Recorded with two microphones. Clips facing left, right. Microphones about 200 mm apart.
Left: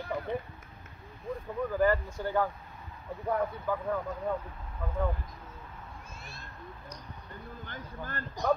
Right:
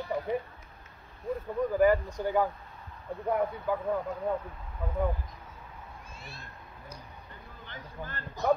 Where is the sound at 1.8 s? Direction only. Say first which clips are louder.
Right 3 dB; 15° right (ahead or behind).